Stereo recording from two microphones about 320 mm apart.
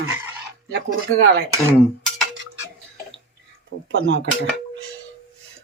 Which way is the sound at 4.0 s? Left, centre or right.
Right.